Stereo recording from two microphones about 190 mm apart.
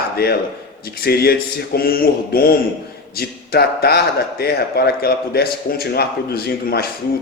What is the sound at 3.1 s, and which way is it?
A man's voice, 55° left (ahead or behind).